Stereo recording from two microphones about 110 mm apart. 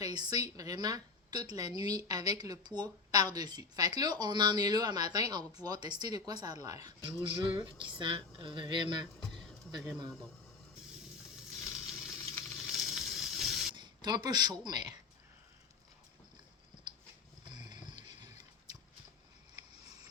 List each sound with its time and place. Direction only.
0.0 s speech: 40° right (ahead or behind)
7.4 s speech: 45° right (ahead or behind)
11.6 s a sound: 5° right (ahead or behind)
13.7 s a sound: 40° right (ahead or behind)
14.6 s speech: 40° right (ahead or behind)
17.5 s music: 40° right (ahead or behind)